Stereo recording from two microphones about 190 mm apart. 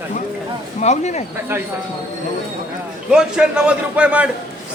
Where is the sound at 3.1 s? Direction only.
5° right (ahead or behind).